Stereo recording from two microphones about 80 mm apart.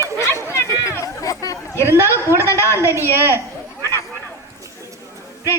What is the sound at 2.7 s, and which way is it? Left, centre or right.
Speech, right.